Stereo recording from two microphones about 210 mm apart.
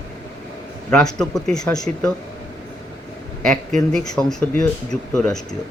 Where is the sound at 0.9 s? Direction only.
5° left (ahead or behind).